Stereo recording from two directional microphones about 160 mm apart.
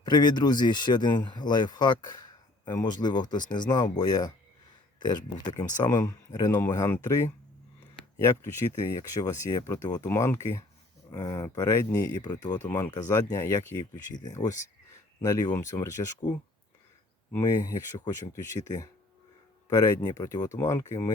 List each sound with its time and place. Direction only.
0.0 s speech: 25° left (ahead or behind)
8.6 s speech: 30° left (ahead or behind)
17.3 s speech: 20° left (ahead or behind)
19.7 s speech: 20° left (ahead or behind)